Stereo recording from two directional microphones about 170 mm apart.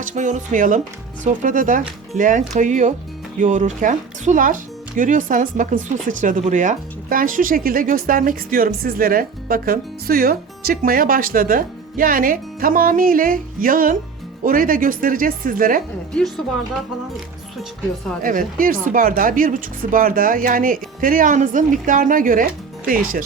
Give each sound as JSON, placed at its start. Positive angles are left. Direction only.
{"t": 0.0, "sound": "speech", "side_deg": -45}
{"t": 18.2, "sound": "speech", "side_deg": -55}